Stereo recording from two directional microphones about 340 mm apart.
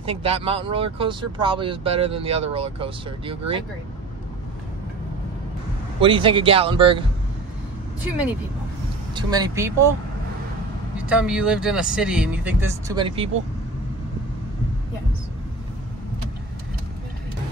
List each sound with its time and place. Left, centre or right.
0.0 s speech: centre
5.9 s speech: centre
9.1 s speech: centre
11.0 s speech: centre